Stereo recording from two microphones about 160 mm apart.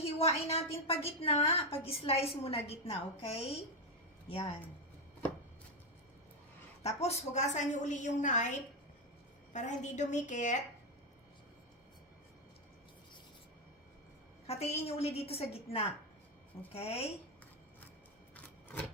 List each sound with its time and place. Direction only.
0.0 s a woman's voice: 40° left (ahead or behind)
6.8 s a woman's voice: 45° left (ahead or behind)
14.4 s a woman's voice: 40° left (ahead or behind)